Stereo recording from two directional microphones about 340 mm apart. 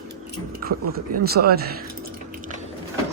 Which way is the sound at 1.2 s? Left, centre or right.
Right.